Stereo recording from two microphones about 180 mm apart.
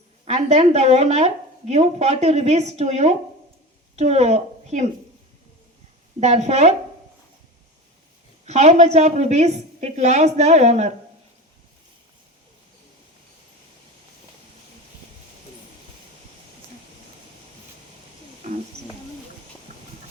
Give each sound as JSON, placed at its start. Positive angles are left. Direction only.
{"t": 0.3, "sound": "a woman's voice", "side_deg": -35}
{"t": 6.1, "sound": "a woman's voice", "side_deg": -40}
{"t": 8.4, "sound": "a woman's voice", "side_deg": -40}